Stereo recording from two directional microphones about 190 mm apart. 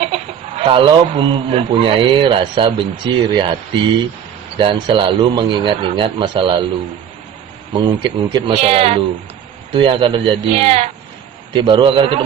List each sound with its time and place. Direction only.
0.0 s chicken: 35° right (ahead or behind)
1.1 s a man's voice: 25° right (ahead or behind)
7.7 s a man's voice: 25° right (ahead or behind)